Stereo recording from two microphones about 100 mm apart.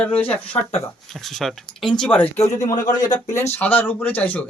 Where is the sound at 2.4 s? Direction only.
35° left (ahead or behind).